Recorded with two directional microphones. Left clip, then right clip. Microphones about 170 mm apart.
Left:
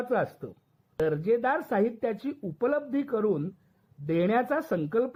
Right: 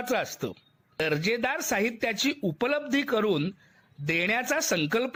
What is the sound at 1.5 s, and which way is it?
Speech, 30° right (ahead or behind).